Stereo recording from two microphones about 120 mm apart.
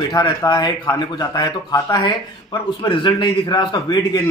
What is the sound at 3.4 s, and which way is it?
Speech, 30° left (ahead or behind).